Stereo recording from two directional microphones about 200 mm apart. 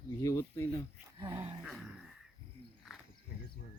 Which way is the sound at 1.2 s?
20° right (ahead or behind).